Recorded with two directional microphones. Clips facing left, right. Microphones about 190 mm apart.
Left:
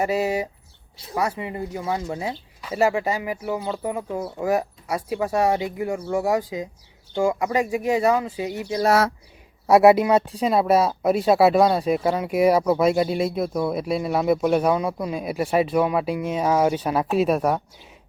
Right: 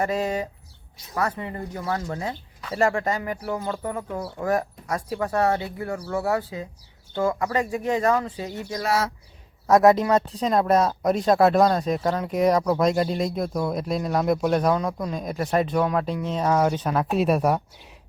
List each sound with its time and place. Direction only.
0.0 s speech: 10° left (ahead or behind)
8.9 s speech: 55° left (ahead or behind)
9.6 s speech: 10° left (ahead or behind)